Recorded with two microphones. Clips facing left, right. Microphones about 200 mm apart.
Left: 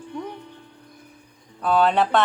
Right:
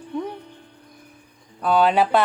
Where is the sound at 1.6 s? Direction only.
Centre (ahead or behind).